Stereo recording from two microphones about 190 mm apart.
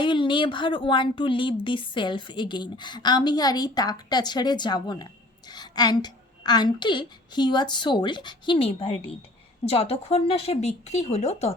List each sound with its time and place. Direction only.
0.0 s a woman's voice: 25° left (ahead or behind)